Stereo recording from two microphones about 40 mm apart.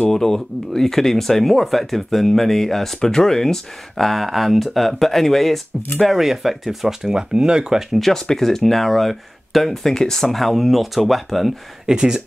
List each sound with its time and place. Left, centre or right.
0.1 s speech: centre
4.0 s speech: centre
6.1 s speech: centre
8.0 s speech: centre
11.8 s speech: centre